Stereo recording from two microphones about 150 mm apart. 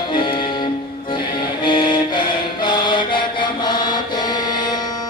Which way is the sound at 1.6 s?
30° left (ahead or behind).